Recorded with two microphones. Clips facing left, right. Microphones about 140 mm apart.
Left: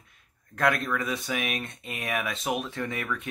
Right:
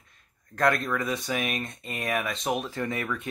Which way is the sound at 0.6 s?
Centre (ahead or behind).